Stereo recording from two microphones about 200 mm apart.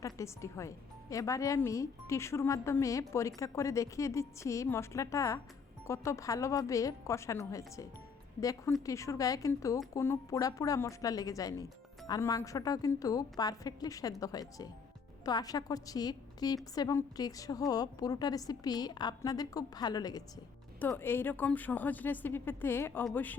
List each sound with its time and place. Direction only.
0.0 s a woman's voice: 15° left (ahead or behind)